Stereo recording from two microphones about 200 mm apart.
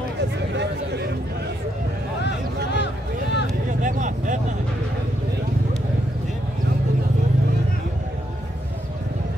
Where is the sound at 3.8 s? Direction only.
40° right (ahead or behind).